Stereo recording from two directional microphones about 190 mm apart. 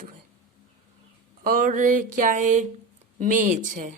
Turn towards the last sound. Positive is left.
turn(degrees=-45)  # may be behind; listen again after turning